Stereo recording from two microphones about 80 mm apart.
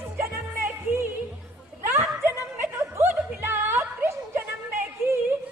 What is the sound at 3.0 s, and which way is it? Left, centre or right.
Music, right.